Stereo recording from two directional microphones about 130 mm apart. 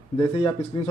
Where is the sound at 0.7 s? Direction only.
40° left (ahead or behind).